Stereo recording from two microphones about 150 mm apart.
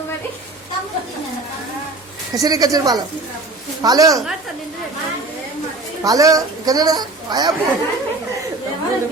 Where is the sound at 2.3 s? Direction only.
25° right (ahead or behind).